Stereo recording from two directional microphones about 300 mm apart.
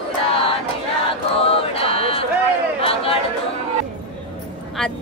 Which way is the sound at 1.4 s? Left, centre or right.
Centre.